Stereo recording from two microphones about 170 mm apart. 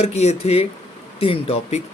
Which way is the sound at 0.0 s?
40° left (ahead or behind).